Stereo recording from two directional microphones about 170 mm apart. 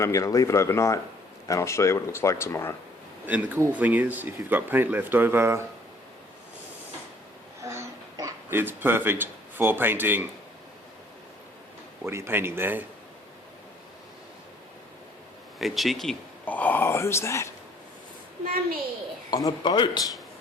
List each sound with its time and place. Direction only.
0.0 s speech: 20° left (ahead or behind)
3.2 s speech: 10° right (ahead or behind)
7.6 s babbling: 15° right (ahead or behind)
12.0 s speech: 15° right (ahead or behind)
15.5 s speech: centre (ahead or behind); by 17.5 s 15° left (ahead or behind)
19.3 s speech: 25° left (ahead or behind)